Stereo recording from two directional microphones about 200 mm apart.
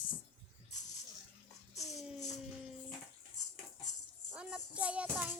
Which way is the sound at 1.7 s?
Centre (ahead or behind).